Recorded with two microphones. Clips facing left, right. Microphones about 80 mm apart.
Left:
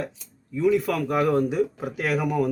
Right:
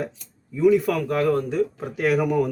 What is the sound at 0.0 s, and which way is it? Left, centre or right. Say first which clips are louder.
Speech: right 2 dB; centre.